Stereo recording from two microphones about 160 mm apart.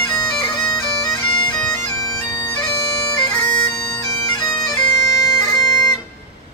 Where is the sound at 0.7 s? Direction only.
25° left (ahead or behind).